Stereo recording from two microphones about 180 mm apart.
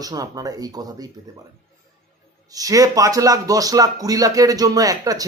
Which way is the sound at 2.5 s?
20° right (ahead or behind).